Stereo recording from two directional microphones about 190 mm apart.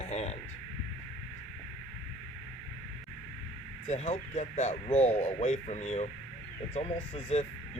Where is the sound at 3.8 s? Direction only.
35° left (ahead or behind).